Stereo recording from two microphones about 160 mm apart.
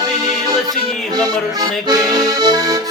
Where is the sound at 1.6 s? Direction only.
25° right (ahead or behind).